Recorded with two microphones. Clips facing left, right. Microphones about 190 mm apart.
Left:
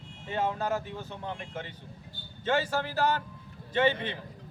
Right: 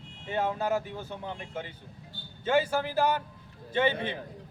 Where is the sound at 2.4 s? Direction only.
10° right (ahead or behind).